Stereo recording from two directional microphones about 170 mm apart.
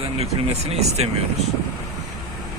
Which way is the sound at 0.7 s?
40° right (ahead or behind).